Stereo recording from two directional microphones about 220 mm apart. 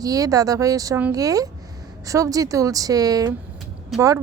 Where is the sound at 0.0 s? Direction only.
15° right (ahead or behind).